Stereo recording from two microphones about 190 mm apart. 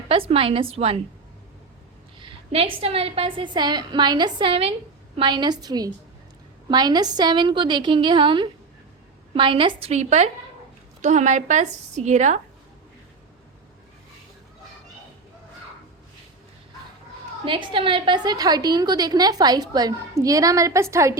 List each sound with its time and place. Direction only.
0.1 s a woman's voice: 30° right (ahead or behind)
2.1 s a woman's voice: 30° right (ahead or behind)
17.4 s a woman's voice: 25° right (ahead or behind)